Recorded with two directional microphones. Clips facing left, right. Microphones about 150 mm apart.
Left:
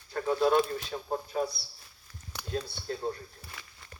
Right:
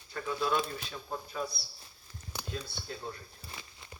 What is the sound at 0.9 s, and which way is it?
Speech, 40° left (ahead or behind).